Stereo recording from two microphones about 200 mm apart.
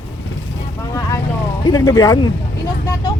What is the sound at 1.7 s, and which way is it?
Speech, 20° left (ahead or behind).